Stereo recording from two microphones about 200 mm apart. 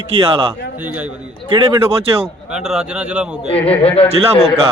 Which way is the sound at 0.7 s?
5° right (ahead or behind).